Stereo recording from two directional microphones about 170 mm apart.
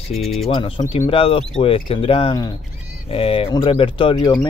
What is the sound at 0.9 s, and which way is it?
Speech, 40° left (ahead or behind).